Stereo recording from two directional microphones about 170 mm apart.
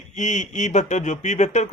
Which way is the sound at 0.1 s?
45° left (ahead or behind).